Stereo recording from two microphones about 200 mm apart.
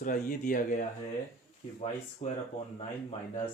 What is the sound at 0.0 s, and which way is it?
Speech, 40° left (ahead or behind).